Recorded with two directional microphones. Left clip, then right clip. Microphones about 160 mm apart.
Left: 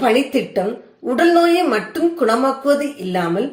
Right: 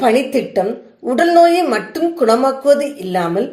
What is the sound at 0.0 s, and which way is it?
Speech, 30° right (ahead or behind).